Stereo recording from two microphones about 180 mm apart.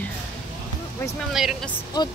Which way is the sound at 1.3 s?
Centre (ahead or behind).